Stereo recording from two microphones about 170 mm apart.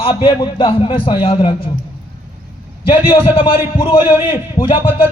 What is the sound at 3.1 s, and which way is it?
A man's voice, 30° left (ahead or behind).